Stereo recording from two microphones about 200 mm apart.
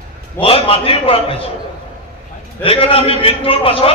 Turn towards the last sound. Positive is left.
turn(degrees=30)  # may be behind; listen again after turning